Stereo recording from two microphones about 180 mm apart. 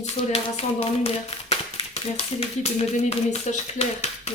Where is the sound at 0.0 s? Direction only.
35° left (ahead or behind).